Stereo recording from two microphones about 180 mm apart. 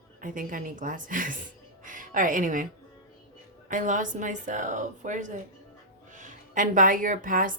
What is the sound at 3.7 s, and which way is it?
Speech, 45° right (ahead or behind).